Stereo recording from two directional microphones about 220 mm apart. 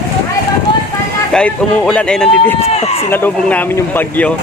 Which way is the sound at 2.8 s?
25° left (ahead or behind).